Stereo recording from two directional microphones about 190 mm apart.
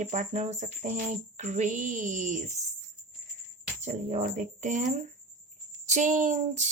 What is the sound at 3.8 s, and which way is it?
Speech, 35° right (ahead or behind).